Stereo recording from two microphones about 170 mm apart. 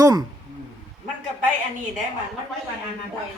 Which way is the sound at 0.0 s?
20° right (ahead or behind).